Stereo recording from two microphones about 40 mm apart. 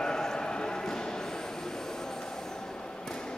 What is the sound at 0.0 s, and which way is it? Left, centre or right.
Clip-clop, centre.